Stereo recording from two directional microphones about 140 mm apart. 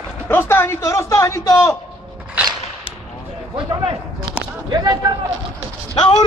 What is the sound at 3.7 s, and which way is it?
Speech, 35° right (ahead or behind).